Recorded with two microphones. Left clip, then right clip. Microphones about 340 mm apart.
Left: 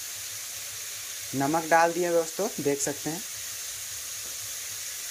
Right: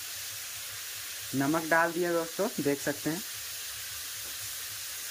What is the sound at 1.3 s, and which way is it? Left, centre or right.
Speech, centre.